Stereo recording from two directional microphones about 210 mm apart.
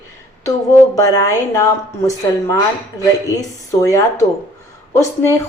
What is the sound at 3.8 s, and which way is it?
Speech, 15° left (ahead or behind).